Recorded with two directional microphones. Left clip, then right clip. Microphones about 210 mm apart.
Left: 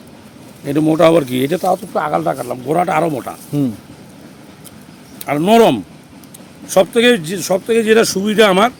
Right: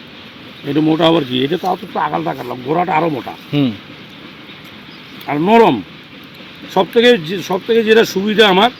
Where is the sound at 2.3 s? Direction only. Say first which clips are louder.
Left 1 dB; 5° left (ahead or behind).